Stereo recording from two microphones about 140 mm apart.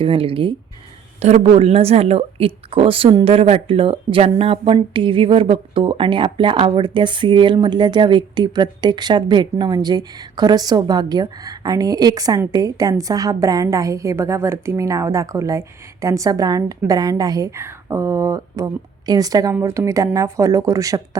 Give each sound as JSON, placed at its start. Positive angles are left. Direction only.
{"t": 0.0, "sound": "a woman's voice", "side_deg": -40}